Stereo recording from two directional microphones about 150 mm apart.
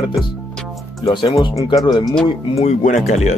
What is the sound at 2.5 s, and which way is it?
Speech, 45° left (ahead or behind).